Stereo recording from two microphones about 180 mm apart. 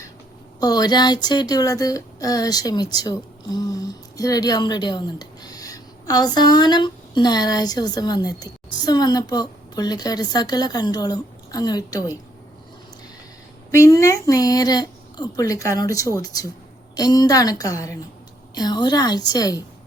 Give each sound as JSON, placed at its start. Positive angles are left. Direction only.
{"t": 0.6, "sound": "speech", "side_deg": 20}
{"t": 13.7, "sound": "speech", "side_deg": 15}